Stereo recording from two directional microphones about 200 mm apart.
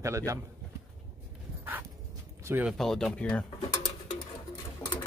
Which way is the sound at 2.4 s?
10° right (ahead or behind).